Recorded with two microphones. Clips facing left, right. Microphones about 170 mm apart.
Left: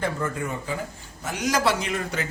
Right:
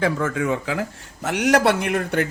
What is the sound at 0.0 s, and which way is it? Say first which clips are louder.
Speech: right 6 dB; 90° right.